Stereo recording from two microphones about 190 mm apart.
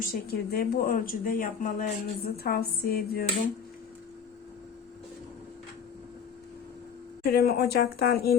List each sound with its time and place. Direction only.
0.0 s speech: 50° left (ahead or behind)
7.3 s speech: 55° left (ahead or behind)